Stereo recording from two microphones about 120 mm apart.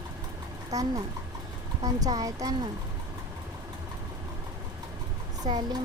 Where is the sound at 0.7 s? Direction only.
30° right (ahead or behind).